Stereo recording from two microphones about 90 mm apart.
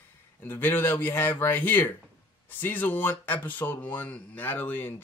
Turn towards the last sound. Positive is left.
turn(degrees=20)  # may be behind; listen again after turning